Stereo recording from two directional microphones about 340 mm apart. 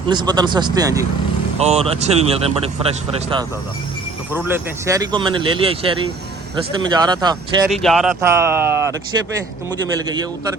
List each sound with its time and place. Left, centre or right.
0.1 s speech: centre
4.3 s speech: centre
7.7 s speech: centre
9.9 s speech: centre